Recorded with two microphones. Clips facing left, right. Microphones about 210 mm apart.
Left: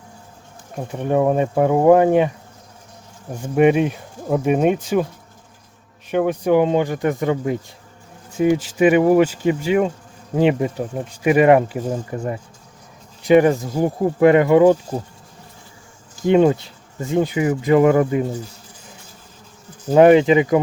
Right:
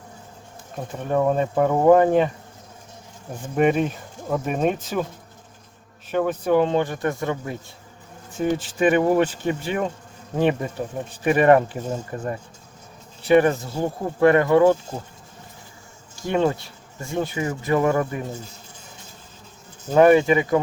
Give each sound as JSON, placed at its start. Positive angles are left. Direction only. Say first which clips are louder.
{"t": 0.9, "sound": "speech", "louder": "left 3 dB", "side_deg": 15}
{"t": 3.3, "sound": "speech", "louder": "left 5 dB", "side_deg": 10}
{"t": 6.1, "sound": "speech", "louder": "left 3 dB", "side_deg": 15}
{"t": 16.2, "sound": "speech", "louder": "left 7 dB", "side_deg": 20}
{"t": 20.0, "sound": "speech", "louder": "left 4 dB", "side_deg": 20}